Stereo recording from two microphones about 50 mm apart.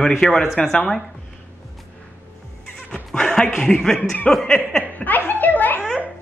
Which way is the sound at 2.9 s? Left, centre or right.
Centre.